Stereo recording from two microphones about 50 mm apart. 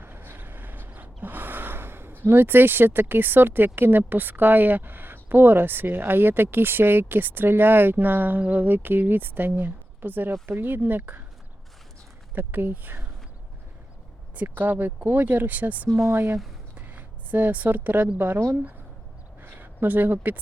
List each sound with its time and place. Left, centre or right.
0.0 s gasp: right
10.4 s speech: right
12.3 s speech: right
14.6 s speech: right
16.0 s speech: right
16.7 s a sound: right
19.4 s speech: right